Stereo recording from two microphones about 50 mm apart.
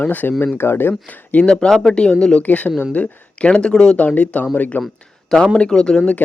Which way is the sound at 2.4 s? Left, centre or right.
Left.